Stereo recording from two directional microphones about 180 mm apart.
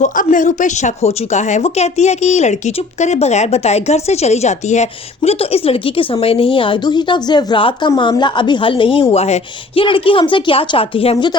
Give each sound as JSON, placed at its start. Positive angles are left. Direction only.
{"t": 0.0, "sound": "a woman's voice", "side_deg": 45}